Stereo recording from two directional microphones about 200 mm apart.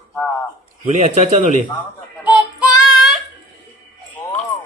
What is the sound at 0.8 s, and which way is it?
Speech, 35° right (ahead or behind).